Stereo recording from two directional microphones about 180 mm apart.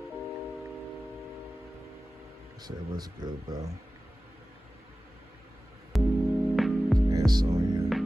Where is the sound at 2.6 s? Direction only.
25° right (ahead or behind).